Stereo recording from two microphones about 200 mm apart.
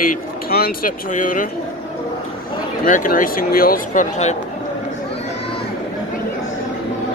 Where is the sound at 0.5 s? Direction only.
50° left (ahead or behind).